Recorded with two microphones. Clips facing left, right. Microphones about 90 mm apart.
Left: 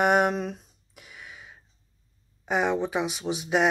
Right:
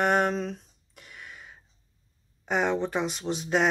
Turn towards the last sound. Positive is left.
turn(degrees=5)  # may be behind; listen again after turning